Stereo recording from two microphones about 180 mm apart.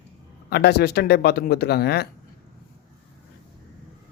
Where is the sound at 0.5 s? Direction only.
65° left (ahead or behind).